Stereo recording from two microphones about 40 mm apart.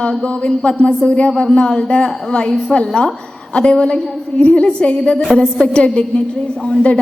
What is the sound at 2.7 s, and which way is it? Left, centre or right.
A woman's voice, left.